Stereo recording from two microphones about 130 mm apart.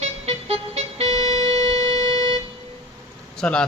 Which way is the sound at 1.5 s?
40° right (ahead or behind).